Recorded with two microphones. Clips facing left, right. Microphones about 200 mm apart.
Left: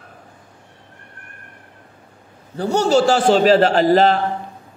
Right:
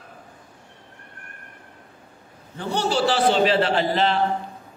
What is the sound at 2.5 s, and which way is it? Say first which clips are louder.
A man's voice: left 8 dB; 40° left (ahead or behind).